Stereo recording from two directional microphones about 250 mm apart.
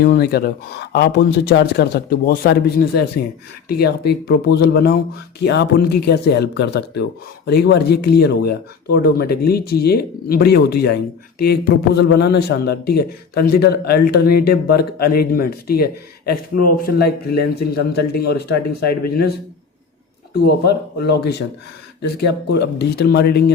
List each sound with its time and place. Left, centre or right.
0.0 s a man's voice: left
20.7 s a man's voice: left